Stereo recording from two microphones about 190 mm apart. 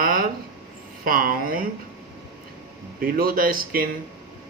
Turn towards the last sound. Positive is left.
turn(degrees=-50)  # may be behind; listen again after turning